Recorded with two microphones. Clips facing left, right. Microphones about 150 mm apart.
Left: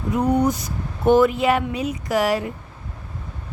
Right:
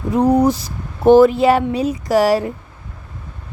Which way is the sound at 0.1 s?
30° right (ahead or behind).